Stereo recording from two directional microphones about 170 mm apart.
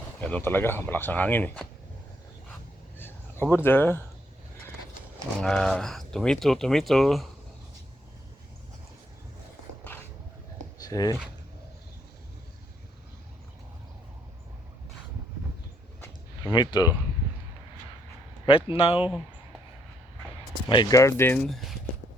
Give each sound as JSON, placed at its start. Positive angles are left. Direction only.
{"t": 0.2, "sound": "speech", "side_deg": 10}
{"t": 3.0, "sound": "a sound", "side_deg": 10}
{"t": 5.4, "sound": "speech", "side_deg": 5}
{"t": 10.8, "sound": "a sound", "side_deg": 20}
{"t": 16.4, "sound": "speech", "side_deg": 25}
{"t": 18.4, "sound": "speech", "side_deg": 30}
{"t": 20.7, "sound": "speech", "side_deg": 25}
{"t": 21.4, "sound": "speech", "side_deg": 0}